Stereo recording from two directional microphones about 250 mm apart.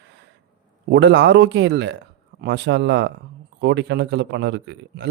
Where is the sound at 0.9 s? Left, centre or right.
Right.